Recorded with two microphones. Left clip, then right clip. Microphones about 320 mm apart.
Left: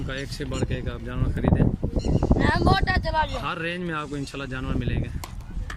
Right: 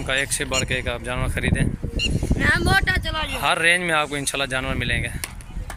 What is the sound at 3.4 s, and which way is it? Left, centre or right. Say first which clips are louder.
Speech: right 11 dB; centre.